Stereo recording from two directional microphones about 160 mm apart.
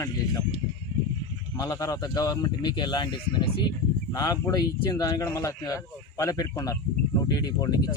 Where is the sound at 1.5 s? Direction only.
20° left (ahead or behind).